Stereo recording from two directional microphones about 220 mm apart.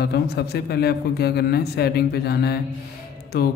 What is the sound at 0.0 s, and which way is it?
A man's voice, 45° left (ahead or behind).